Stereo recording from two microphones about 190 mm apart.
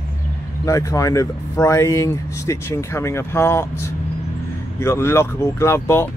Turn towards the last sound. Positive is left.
turn(degrees=15)  # may be behind; listen again after turning